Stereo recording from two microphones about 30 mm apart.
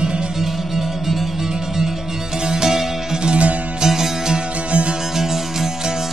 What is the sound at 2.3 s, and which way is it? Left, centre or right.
Music, right.